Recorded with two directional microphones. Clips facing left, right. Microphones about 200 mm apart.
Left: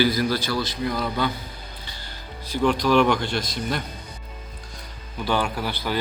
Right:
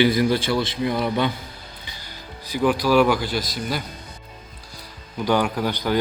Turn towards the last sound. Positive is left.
turn(degrees=-15)  # may be behind; listen again after turning